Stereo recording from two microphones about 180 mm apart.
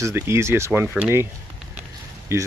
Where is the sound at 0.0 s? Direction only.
15° right (ahead or behind).